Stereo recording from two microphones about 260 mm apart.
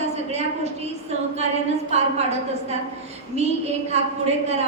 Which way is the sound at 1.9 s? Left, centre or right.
Right.